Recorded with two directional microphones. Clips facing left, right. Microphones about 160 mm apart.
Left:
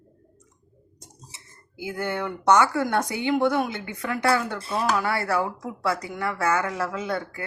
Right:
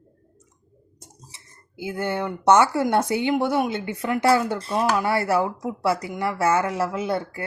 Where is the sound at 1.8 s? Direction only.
25° right (ahead or behind).